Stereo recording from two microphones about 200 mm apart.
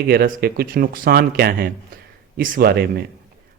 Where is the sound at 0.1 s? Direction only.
50° right (ahead or behind).